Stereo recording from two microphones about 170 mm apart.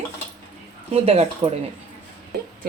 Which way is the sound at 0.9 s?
40° right (ahead or behind).